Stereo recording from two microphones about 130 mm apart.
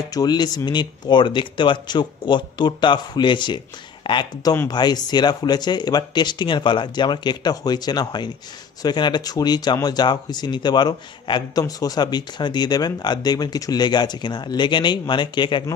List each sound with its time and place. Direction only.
0.1 s speech: 30° left (ahead or behind)